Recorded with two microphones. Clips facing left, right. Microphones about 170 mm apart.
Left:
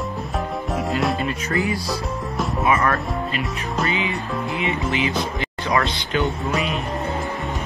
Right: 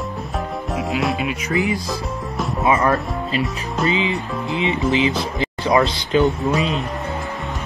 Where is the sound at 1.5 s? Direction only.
20° right (ahead or behind).